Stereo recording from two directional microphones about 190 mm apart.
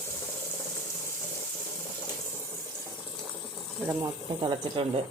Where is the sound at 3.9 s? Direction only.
20° right (ahead or behind).